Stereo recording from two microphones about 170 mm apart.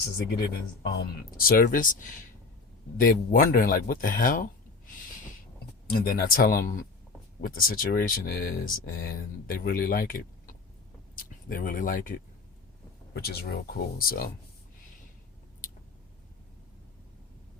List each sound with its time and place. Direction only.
0.3 s speech: 65° left (ahead or behind)
6.1 s speech: 55° left (ahead or behind)
13.1 s speech: 65° left (ahead or behind)